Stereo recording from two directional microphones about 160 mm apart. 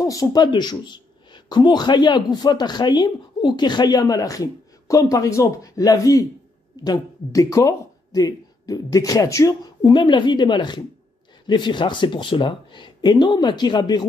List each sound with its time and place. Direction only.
0.0 s speech: 25° left (ahead or behind)